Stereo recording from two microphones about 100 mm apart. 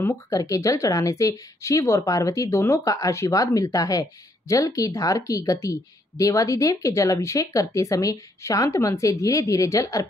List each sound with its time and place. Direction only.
0.0 s speech: 35° left (ahead or behind)